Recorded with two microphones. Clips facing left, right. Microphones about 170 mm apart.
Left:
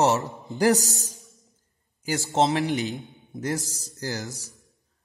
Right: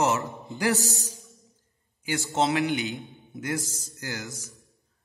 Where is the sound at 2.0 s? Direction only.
40° left (ahead or behind).